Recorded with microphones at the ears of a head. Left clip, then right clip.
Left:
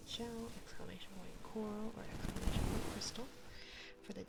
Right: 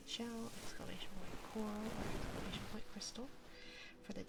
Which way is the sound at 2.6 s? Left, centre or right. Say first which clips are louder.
Left 9 dB; left.